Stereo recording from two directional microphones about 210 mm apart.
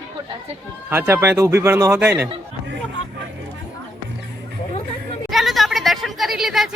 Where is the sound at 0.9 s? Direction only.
10° right (ahead or behind).